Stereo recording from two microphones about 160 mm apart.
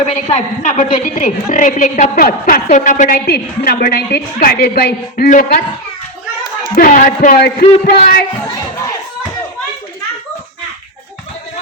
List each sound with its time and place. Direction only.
0.0 s a woman's voice: 45° left (ahead or behind); by 5.3 s 75° left (ahead or behind)
6.7 s a woman's voice: 55° left (ahead or behind)